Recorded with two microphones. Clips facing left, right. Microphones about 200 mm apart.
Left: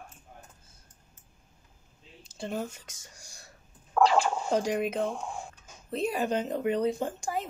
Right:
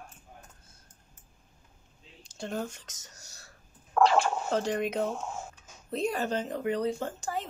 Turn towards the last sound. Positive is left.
turn(degrees=15)  # may be behind; listen again after turning